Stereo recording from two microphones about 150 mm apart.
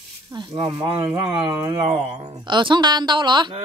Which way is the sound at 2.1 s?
30° right (ahead or behind).